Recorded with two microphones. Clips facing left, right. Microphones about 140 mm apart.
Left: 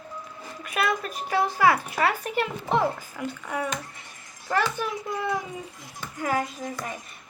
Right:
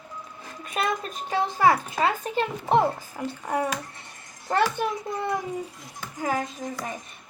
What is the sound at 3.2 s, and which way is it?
Speech, 35° right (ahead or behind).